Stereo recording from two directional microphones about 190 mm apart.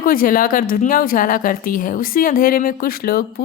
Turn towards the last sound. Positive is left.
turn(degrees=50)  # may be behind; listen again after turning